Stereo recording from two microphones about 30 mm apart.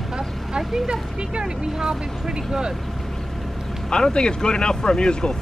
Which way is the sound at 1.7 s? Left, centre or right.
Right.